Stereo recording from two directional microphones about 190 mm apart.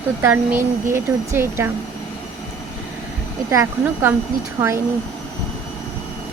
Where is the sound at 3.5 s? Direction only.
15° right (ahead or behind).